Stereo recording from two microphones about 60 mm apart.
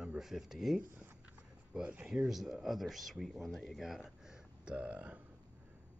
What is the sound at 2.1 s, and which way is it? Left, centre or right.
Speech, centre.